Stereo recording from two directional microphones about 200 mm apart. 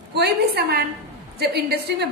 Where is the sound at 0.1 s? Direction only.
55° right (ahead or behind).